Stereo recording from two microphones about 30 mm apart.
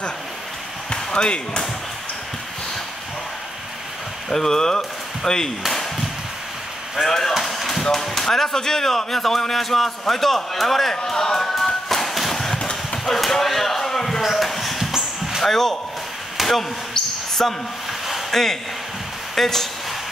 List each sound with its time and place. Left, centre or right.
0.8 s speech: left
4.3 s speech: centre
5.7 s a sound: centre
7.1 s speech: centre
7.3 s music: centre
7.8 s a man's voice: centre
13.0 s a sound: centre
14.2 s a sound: centre
14.8 s dog: centre
15.4 s speech: centre
16.4 s a sound: centre
17.4 s speech: centre
18.3 s speech: centre